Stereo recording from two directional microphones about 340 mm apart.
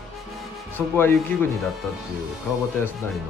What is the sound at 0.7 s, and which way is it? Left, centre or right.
Speech, centre.